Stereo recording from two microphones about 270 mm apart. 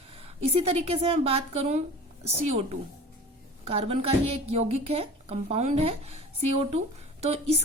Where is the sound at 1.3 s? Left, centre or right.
Right.